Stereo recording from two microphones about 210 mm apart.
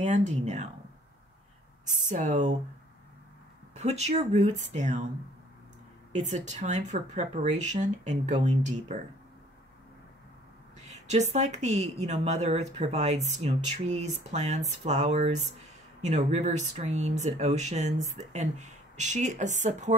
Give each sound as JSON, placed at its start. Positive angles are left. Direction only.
{"t": 0.0, "sound": "a woman's voice", "side_deg": -35}
{"t": 2.0, "sound": "a woman's voice", "side_deg": -35}
{"t": 3.7, "sound": "a woman's voice", "side_deg": -30}
{"t": 6.1, "sound": "a woman's voice", "side_deg": -35}
{"t": 10.9, "sound": "a woman's voice", "side_deg": -35}